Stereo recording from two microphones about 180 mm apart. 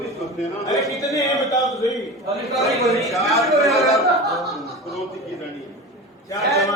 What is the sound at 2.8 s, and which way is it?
A man's voice, centre (ahead or behind).